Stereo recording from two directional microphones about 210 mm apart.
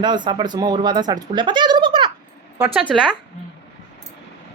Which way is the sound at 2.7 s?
Centre (ahead or behind).